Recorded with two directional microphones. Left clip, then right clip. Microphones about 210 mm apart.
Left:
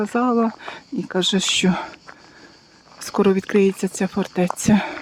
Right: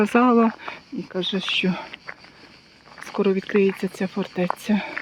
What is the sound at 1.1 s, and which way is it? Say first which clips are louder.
Speech: left 5 dB; 30° left (ahead or behind).